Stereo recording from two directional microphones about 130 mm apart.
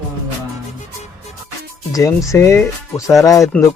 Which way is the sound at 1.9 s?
25° left (ahead or behind).